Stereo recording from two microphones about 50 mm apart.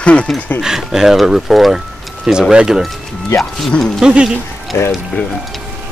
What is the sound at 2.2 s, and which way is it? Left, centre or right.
Speech, centre.